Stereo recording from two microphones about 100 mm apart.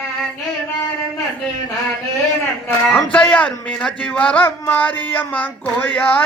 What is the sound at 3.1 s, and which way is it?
A man's voice, 15° left (ahead or behind).